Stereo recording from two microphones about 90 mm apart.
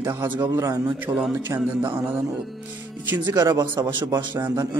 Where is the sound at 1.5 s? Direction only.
25° right (ahead or behind).